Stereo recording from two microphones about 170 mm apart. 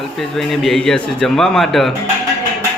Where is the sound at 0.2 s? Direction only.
Centre (ahead or behind).